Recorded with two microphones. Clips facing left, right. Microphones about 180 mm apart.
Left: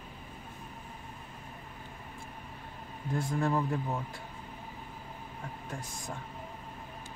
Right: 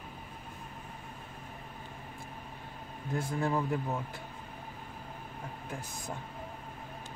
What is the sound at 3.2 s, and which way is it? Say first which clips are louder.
Speech: left 1 dB; centre (ahead or behind).